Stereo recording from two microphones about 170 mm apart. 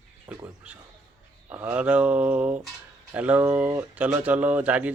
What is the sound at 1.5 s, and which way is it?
Speech, 10° right (ahead or behind).